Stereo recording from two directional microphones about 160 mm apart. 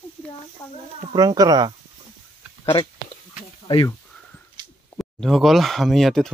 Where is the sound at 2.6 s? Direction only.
30° left (ahead or behind).